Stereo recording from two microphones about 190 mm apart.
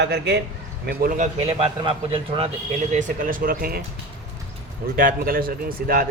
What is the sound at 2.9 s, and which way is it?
Speech, 45° right (ahead or behind).